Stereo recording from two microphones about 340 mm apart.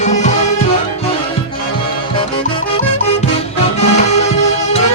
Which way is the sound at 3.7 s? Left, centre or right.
Centre.